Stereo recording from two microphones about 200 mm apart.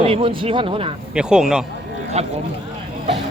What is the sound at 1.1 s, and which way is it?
Speech, 5° right (ahead or behind).